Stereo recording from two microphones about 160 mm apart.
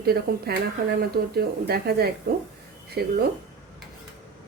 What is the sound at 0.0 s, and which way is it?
Speech, 75° right (ahead or behind).